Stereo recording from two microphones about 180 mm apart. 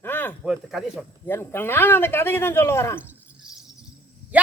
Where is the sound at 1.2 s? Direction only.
10° left (ahead or behind).